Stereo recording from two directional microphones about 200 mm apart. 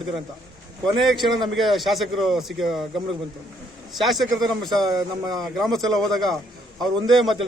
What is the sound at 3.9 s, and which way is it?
Speech, centre (ahead or behind).